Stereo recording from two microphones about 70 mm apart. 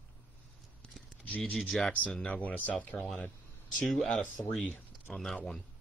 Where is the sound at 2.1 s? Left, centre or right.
Centre.